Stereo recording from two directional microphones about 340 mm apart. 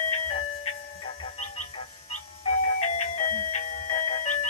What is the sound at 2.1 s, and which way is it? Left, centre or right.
Music, centre.